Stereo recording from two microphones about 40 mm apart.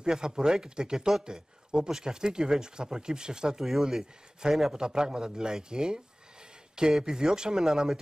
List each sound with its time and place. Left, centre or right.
0.0 s a man's voice: centre